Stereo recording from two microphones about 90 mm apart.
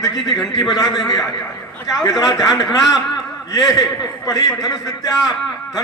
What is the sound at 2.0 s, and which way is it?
Speech, 45° left (ahead or behind).